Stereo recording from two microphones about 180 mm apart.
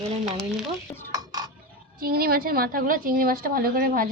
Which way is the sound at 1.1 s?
20° right (ahead or behind).